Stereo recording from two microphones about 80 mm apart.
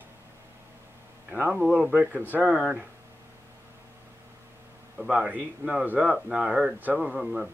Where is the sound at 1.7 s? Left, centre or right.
Centre.